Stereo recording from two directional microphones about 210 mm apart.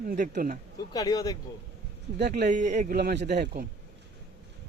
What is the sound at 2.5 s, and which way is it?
Speech, 35° right (ahead or behind).